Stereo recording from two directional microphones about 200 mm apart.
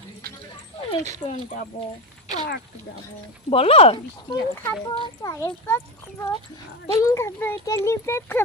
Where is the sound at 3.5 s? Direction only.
30° left (ahead or behind).